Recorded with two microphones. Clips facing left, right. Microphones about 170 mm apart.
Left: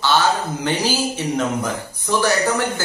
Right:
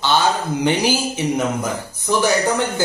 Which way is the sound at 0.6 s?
15° right (ahead or behind).